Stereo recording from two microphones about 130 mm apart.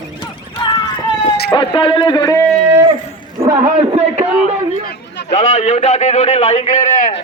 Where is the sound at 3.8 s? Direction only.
55° right (ahead or behind).